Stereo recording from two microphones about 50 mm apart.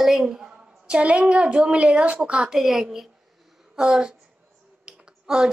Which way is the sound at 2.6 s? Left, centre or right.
Centre.